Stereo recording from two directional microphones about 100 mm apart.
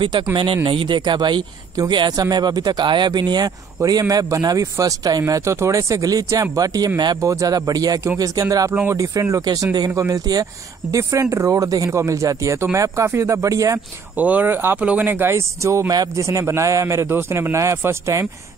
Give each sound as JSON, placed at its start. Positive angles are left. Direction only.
{"t": 0.0, "sound": "speech", "side_deg": -55}
{"t": 14.1, "sound": "speech", "side_deg": -15}